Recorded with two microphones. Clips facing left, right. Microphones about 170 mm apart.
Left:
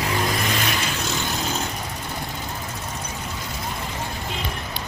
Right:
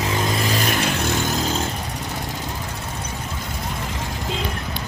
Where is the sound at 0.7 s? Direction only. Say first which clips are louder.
Right 5 dB; 60° right (ahead or behind).